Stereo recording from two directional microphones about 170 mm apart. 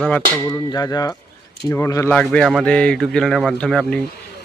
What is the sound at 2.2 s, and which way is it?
Speech, 5° left (ahead or behind).